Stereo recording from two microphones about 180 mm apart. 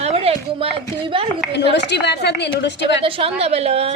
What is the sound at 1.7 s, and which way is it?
A woman's voice, 70° left (ahead or behind).